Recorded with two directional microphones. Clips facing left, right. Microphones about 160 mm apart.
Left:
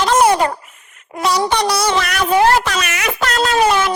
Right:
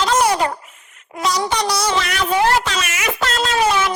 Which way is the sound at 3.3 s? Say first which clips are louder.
Left 4 dB; 45° left (ahead or behind).